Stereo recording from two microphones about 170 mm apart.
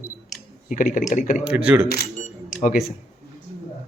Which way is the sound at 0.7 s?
50° left (ahead or behind).